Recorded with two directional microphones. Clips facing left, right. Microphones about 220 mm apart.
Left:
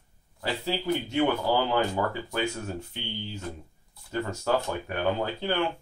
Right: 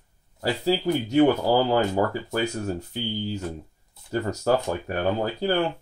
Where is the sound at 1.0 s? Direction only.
40° right (ahead or behind).